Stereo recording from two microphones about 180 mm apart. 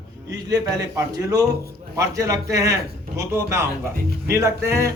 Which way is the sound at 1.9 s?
15° right (ahead or behind).